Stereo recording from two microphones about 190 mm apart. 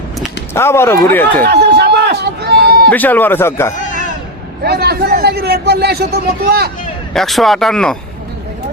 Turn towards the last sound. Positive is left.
turn(degrees=5)  # may be behind; listen again after turning